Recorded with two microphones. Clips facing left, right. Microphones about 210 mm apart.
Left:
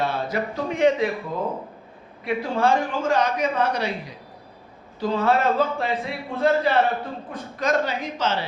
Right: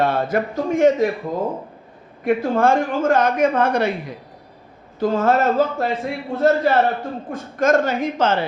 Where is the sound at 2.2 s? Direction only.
50° right (ahead or behind).